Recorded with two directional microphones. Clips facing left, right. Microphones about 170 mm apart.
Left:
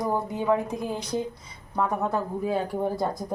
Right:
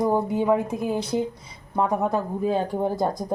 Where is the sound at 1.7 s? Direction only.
20° right (ahead or behind).